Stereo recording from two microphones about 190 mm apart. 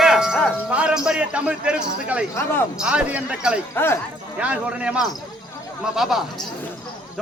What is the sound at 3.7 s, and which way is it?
Speech, 10° left (ahead or behind).